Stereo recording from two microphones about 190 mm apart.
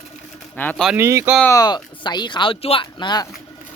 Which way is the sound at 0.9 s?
10° right (ahead or behind).